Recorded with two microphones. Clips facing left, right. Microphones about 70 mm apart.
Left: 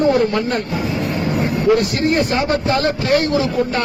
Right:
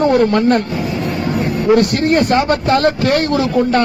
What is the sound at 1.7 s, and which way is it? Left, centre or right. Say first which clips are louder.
Speech: right 7 dB; right.